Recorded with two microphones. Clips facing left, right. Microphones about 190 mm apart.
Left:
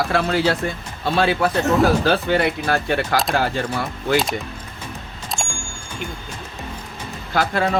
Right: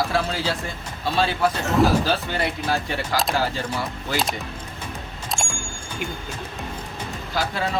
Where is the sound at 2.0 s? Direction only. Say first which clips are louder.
Left 6 dB; 60° left (ahead or behind).